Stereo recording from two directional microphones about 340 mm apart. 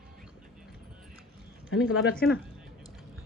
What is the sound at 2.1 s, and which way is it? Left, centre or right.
Speech, centre.